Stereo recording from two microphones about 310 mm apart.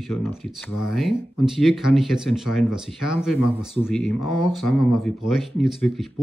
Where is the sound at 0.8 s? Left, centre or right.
Centre.